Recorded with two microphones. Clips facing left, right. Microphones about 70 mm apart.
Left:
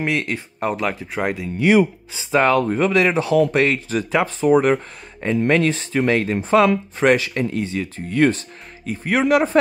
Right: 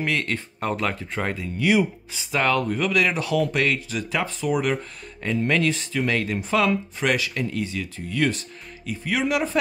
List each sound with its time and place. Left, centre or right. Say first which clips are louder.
0.0 s speech: left 3 dB; centre
1.6 s speech: left 5 dB; left